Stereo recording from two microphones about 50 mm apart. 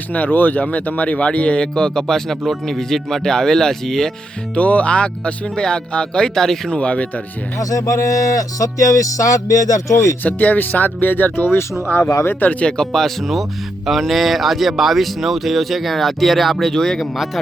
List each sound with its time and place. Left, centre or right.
0.1 s speech: left; by 4.1 s centre
4.5 s speech: left; by 6.7 s centre
6.7 s speech: left
7.8 s speech: left
10.2 s speech: left
12.4 s speech: left
12.6 s speech: centre